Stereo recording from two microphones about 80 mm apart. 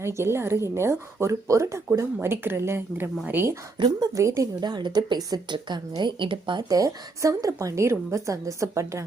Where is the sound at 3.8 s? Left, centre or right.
Right.